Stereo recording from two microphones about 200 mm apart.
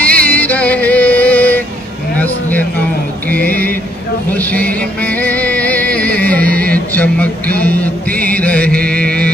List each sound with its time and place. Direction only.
0.0 s music: 10° left (ahead or behind)
3.3 s music: 10° left (ahead or behind)
6.7 s a sound: 5° left (ahead or behind)
8.8 s mantra: 5° left (ahead or behind)